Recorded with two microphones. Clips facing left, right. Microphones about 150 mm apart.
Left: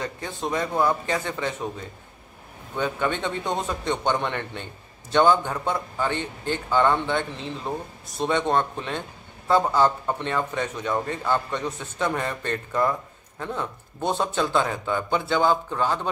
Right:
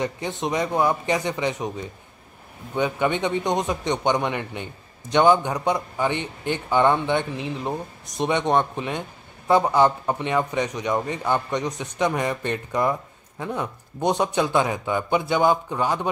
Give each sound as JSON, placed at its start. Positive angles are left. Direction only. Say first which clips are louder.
{"t": 0.0, "sound": "a man's voice", "louder": "right 4 dB", "side_deg": -20}
{"t": 2.7, "sound": "a man's voice", "louder": "right 3 dB", "side_deg": -15}